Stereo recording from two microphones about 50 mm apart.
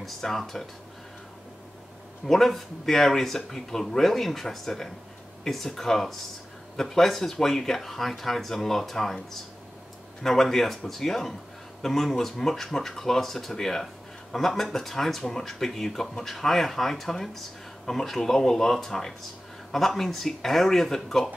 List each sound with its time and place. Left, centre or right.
0.0 s speech: centre
2.2 s speech: centre